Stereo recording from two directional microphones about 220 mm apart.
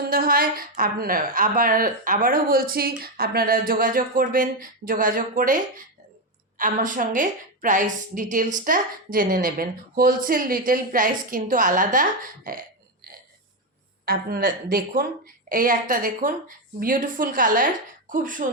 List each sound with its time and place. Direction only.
0.0 s a woman's voice: 40° right (ahead or behind)
14.0 s a woman's voice: 45° right (ahead or behind)